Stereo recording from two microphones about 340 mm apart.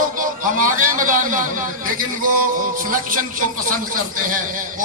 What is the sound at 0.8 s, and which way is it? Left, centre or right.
Speech, right.